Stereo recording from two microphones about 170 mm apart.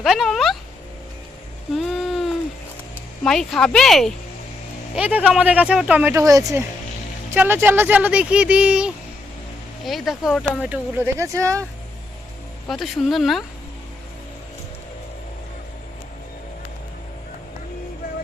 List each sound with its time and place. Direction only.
0.0 s speech: centre (ahead or behind)
1.7 s a sound: centre (ahead or behind)
3.2 s speech: 5° left (ahead or behind)
4.9 s speech: 10° right (ahead or behind)
10.7 s speech: 15° right (ahead or behind)
12.6 s speech: centre (ahead or behind)